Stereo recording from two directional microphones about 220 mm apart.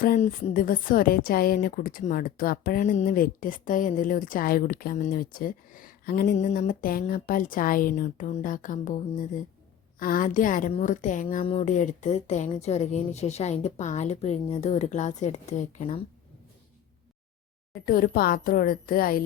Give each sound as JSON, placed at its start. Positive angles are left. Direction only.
{"t": 0.0, "sound": "a woman's voice", "side_deg": 40}
{"t": 10.0, "sound": "a woman's voice", "side_deg": 40}
{"t": 17.8, "sound": "a woman's voice", "side_deg": 40}